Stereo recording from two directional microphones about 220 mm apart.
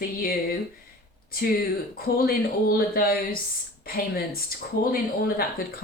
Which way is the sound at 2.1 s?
45° left (ahead or behind).